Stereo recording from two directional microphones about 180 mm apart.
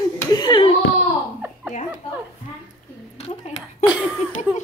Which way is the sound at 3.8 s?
5° right (ahead or behind).